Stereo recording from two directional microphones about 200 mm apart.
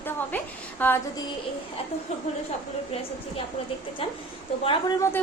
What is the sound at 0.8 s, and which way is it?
Female singing, 10° left (ahead or behind).